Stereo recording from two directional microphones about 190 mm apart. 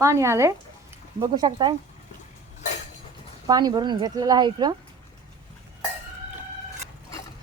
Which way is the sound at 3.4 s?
20° right (ahead or behind).